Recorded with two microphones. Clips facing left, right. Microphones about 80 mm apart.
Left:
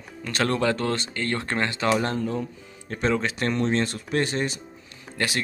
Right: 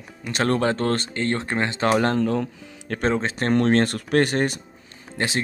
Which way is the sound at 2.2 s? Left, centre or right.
Right.